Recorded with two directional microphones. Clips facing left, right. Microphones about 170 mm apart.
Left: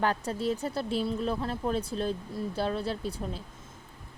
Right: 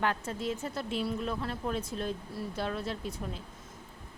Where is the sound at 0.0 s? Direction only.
35° left (ahead or behind).